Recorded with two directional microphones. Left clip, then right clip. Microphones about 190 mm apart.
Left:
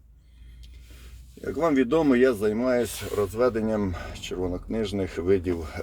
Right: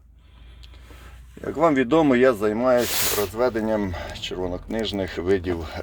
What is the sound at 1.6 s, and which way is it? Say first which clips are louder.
A man's voice: right 4 dB; centre (ahead or behind).